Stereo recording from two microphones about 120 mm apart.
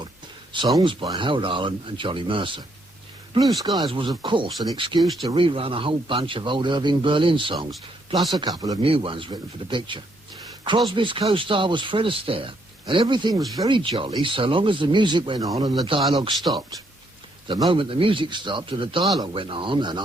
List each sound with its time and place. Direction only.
0.5 s a man's voice: 40° right (ahead or behind)
3.6 s speech: 30° right (ahead or behind)
3.8 s a man's voice: 45° right (ahead or behind)
7.7 s speech: centre (ahead or behind)
8.3 s speech: 35° right (ahead or behind)
8.8 s a man's voice: 50° right (ahead or behind); by 15.7 s 30° right (ahead or behind)
15.9 s a man's voice: 45° right (ahead or behind)
17.5 s a man's voice: 40° right (ahead or behind)